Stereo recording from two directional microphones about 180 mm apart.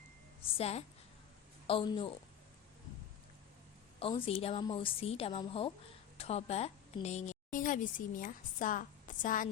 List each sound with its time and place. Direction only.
0.5 s a woman's voice: 35° left (ahead or behind)
4.0 s a woman's voice: 30° left (ahead or behind)